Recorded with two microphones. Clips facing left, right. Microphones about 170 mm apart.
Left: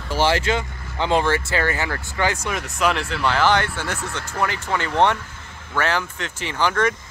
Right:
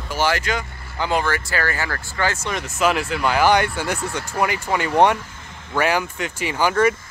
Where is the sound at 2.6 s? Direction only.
5° right (ahead or behind).